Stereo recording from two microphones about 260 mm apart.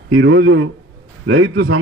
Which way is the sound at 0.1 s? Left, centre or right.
Right.